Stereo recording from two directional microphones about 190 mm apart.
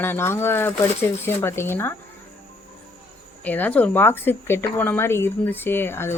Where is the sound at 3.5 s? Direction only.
10° left (ahead or behind).